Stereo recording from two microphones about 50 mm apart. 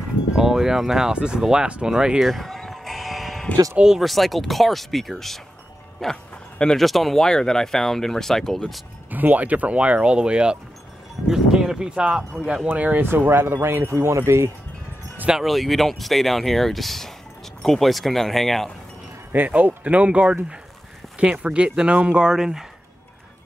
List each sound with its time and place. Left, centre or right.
0.4 s speech: centre
2.2 s music: centre
3.7 s speech: centre
4.0 s speech: centre
9.1 s speech: right
13.3 s speech: right
15.4 s speech: centre
19.3 s speech: right
22.3 s speech: centre